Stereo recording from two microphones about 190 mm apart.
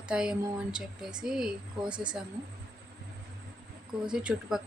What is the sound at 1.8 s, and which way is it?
Speech, 25° right (ahead or behind).